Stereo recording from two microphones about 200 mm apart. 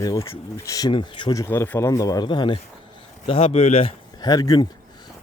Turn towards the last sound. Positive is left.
turn(degrees=20)  # may be behind; listen again after turning